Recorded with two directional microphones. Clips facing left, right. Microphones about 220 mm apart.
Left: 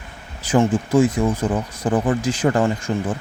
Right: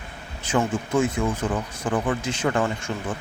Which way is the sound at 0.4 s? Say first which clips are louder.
Left 6 dB; 35° left (ahead or behind).